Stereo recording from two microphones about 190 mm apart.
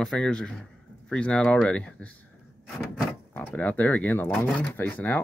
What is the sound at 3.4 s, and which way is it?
Speech, 10° left (ahead or behind).